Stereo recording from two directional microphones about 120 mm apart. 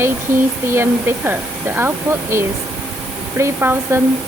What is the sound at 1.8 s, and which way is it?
Speech, 20° right (ahead or behind).